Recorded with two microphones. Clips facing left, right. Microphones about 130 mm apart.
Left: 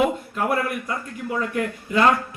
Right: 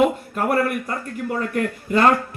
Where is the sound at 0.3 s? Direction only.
45° right (ahead or behind).